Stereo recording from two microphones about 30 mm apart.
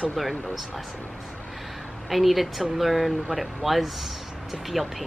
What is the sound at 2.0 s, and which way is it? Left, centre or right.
Speech, centre.